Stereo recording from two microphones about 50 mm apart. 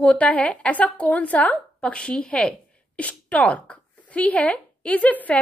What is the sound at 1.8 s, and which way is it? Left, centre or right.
A woman's voice, centre.